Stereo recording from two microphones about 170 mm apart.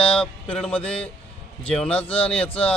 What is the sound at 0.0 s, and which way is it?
A man's voice, 5° left (ahead or behind).